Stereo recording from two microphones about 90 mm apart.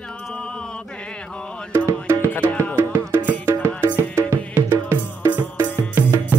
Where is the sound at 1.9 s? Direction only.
35° right (ahead or behind).